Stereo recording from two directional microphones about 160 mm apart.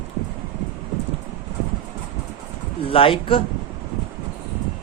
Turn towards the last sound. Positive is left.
turn(degrees=35)  # may be behind; listen again after turning